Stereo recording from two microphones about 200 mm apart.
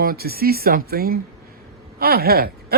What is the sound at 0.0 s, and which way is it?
Speech, 50° right (ahead or behind).